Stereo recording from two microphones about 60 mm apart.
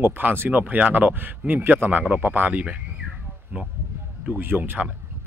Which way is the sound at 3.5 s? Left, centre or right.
Right.